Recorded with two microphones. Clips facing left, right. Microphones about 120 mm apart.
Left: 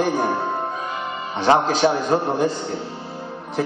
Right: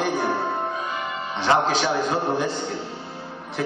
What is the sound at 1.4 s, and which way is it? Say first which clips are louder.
A man's voice: left 4 dB; 40° left (ahead or behind).